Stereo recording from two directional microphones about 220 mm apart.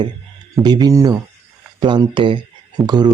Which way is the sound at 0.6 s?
20° right (ahead or behind).